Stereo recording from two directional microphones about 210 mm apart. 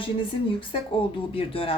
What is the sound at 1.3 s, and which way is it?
Speech, 25° left (ahead or behind).